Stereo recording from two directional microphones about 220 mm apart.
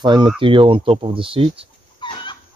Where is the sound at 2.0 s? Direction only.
20° left (ahead or behind).